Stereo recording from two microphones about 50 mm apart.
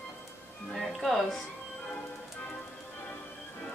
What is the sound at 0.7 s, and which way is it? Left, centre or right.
Music, centre.